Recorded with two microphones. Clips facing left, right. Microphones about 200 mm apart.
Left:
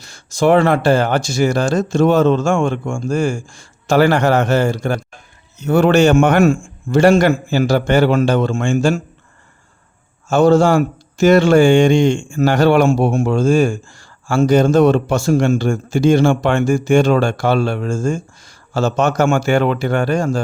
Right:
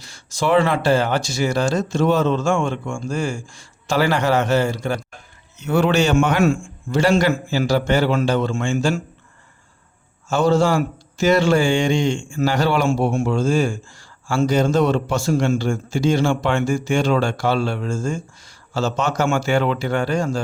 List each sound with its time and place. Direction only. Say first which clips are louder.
0.0 s speech: left 7 dB; 50° left (ahead or behind)
10.2 s speech: left 5 dB; 50° left (ahead or behind)